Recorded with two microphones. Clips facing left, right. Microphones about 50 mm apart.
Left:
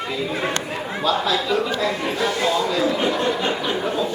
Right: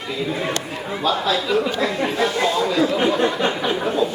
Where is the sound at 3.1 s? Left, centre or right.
Right.